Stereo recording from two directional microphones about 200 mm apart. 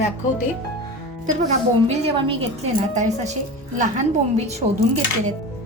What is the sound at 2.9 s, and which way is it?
Speech, 35° right (ahead or behind).